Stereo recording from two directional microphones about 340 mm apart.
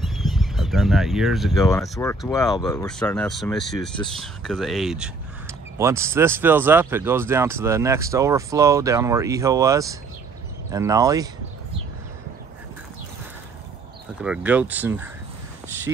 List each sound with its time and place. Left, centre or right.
0.0 s speech: centre
14.2 s speech: centre